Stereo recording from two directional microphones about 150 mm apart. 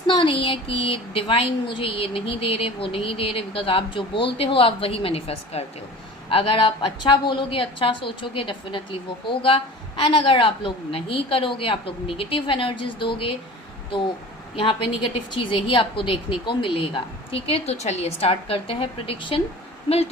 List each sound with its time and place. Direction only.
0.1 s a woman's voice: 35° left (ahead or behind)
14.5 s a woman's voice: 35° left (ahead or behind)